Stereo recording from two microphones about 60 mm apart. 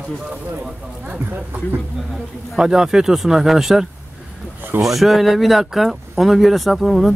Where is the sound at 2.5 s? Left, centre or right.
Centre.